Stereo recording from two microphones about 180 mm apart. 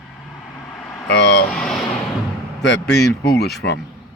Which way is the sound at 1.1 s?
75° left (ahead or behind).